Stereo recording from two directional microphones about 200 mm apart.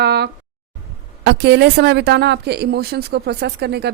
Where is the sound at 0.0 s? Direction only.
55° right (ahead or behind).